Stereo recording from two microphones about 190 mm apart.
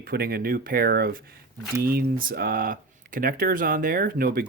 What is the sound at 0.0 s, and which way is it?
Speech, 50° right (ahead or behind).